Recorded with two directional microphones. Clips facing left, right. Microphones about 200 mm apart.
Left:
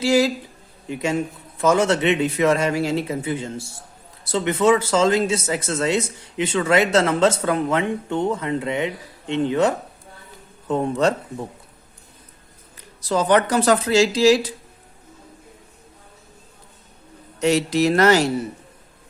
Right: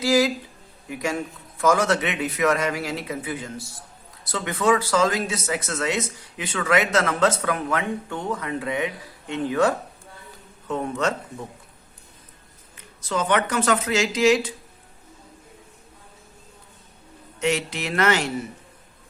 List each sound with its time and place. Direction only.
0.0 s a man's voice: 30° left (ahead or behind)
12.7 s speech: 35° left (ahead or behind)
17.4 s speech: 35° left (ahead or behind)